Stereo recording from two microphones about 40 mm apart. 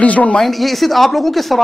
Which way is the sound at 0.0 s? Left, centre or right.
Left.